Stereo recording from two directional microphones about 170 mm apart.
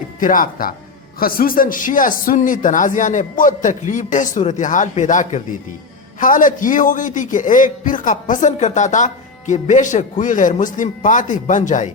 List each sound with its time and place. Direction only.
0.2 s a man's voice: 55° left (ahead or behind)